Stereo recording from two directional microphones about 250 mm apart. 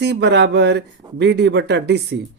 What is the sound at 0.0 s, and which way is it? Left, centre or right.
Speech, right.